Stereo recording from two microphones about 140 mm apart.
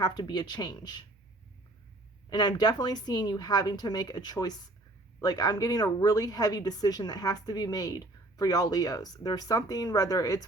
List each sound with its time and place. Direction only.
0.0 s speech: 30° left (ahead or behind)
2.3 s a woman's voice: 30° left (ahead or behind)